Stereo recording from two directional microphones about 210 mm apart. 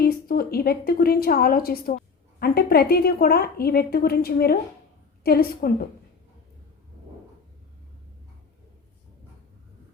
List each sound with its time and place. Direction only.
0.0 s a woman's voice: 45° left (ahead or behind)